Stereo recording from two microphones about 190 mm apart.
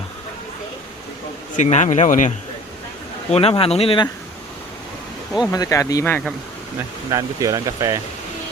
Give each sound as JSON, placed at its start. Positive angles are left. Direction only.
{"t": 1.5, "sound": "speech", "side_deg": 40}
{"t": 3.3, "sound": "speech", "side_deg": 30}
{"t": 5.5, "sound": "speech", "side_deg": 15}
{"t": 7.1, "sound": "speech", "side_deg": -15}